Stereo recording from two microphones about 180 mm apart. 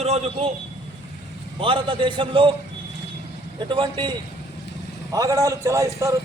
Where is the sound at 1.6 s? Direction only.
30° right (ahead or behind).